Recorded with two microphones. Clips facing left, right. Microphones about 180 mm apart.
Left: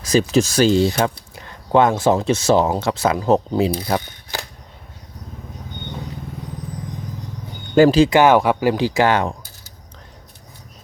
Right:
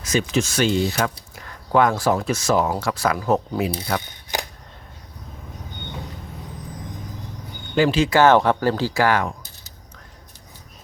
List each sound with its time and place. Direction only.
0.0 s speech: 35° left (ahead or behind)
4.3 s a sound: 15° right (ahead or behind)
7.8 s speech: 40° left (ahead or behind)
8.1 s speech: 10° left (ahead or behind)